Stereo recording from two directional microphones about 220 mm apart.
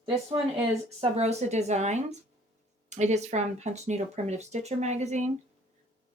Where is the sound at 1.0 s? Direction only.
30° right (ahead or behind).